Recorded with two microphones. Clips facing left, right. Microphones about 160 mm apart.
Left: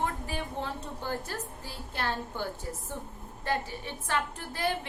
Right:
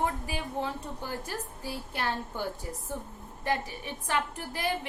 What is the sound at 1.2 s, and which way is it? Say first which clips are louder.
A woman's voice: right 2 dB; 15° right (ahead or behind).